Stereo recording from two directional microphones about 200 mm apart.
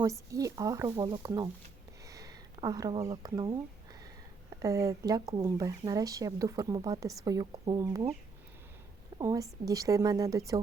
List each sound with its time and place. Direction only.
0.0 s speech: 15° right (ahead or behind)
4.6 s speech: 15° right (ahead or behind)
9.1 s speech: 15° right (ahead or behind)